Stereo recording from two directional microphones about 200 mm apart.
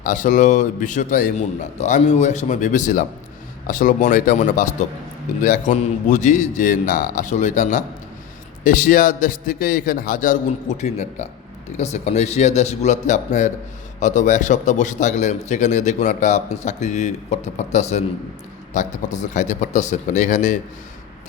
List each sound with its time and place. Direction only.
0.0 s a man's voice: 40° left (ahead or behind)